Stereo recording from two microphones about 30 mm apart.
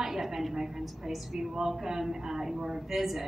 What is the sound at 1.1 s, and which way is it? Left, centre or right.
A woman's voice, centre.